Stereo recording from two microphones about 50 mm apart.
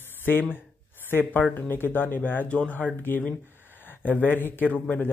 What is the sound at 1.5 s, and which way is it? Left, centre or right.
Speech, left.